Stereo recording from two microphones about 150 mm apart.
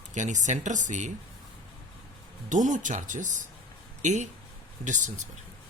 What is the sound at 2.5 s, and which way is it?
Speech, 55° right (ahead or behind).